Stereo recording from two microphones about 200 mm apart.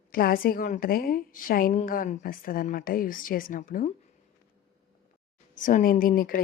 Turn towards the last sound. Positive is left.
turn(degrees=45)  # may be behind; listen again after turning